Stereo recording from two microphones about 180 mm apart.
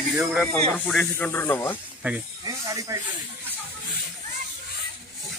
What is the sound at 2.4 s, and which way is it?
Speech, 20° right (ahead or behind).